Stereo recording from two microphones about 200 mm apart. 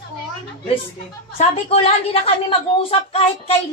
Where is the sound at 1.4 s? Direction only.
30° left (ahead or behind).